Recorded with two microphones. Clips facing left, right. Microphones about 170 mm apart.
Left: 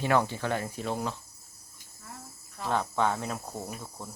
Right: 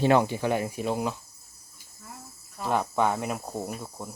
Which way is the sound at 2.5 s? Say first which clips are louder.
Right 3 dB; 10° right (ahead or behind).